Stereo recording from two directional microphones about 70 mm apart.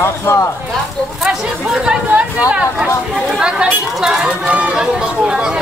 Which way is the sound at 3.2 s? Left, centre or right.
Centre.